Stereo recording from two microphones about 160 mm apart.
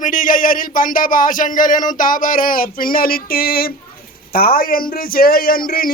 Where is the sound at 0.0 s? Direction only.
55° left (ahead or behind).